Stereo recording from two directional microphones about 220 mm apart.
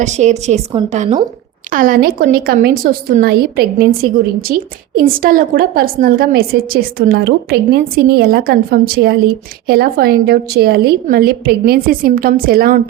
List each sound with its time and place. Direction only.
0.0 s a woman's voice: 30° right (ahead or behind)